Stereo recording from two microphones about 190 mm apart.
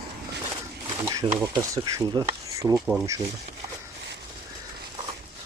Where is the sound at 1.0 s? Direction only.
15° right (ahead or behind).